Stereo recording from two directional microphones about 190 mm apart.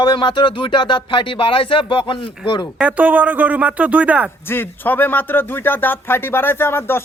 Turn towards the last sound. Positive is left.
turn(degrees=10)  # may be behind; listen again after turning